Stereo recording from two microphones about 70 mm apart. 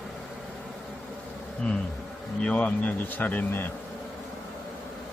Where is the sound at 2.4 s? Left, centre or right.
Centre.